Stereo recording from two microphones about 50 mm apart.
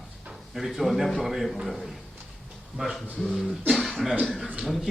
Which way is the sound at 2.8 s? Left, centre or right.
Right.